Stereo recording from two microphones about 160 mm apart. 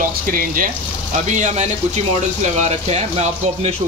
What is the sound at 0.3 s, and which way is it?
Speech, 60° right (ahead or behind).